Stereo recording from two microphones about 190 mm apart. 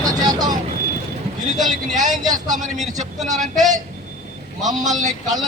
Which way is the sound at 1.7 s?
40° right (ahead or behind).